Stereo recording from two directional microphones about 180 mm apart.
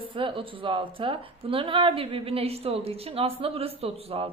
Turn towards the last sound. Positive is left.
turn(degrees=-35)  # may be behind; listen again after turning